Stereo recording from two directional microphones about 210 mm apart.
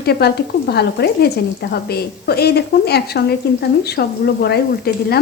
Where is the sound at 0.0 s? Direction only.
50° left (ahead or behind).